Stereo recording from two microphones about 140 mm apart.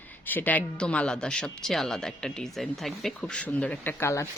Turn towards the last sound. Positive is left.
turn(degrees=20)  # may be behind; listen again after turning